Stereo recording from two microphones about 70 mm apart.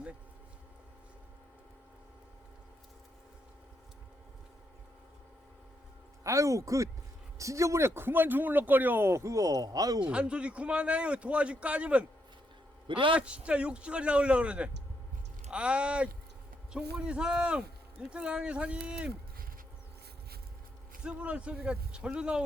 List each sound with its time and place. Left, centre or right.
6.2 s speech: right
10.0 s a man's voice: centre
13.1 s a man's voice: centre
21.0 s a man's voice: centre